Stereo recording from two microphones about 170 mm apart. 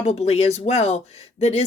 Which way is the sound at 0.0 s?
40° left (ahead or behind).